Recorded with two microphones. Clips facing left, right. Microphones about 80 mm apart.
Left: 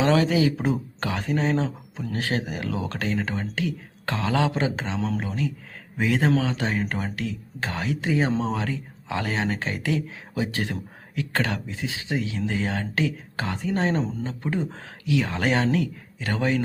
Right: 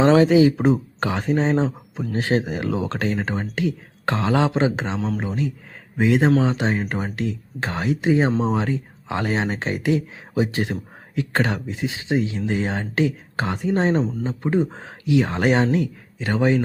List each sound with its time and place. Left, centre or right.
0.2 s speech: right
4.9 s speech: centre
5.2 s speech: right